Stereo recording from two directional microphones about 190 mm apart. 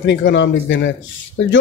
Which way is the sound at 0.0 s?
70° left (ahead or behind).